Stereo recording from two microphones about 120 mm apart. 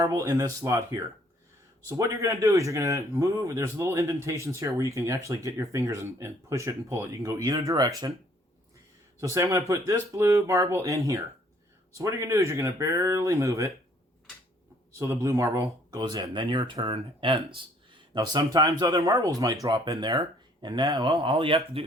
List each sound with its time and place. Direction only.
0.0 s speech: 25° right (ahead or behind)
9.2 s speech: 25° right (ahead or behind)
14.9 s speech: 25° right (ahead or behind)
21.1 s speech: 45° right (ahead or behind)